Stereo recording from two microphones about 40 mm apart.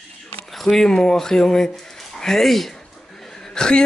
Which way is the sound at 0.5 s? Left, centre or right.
Centre.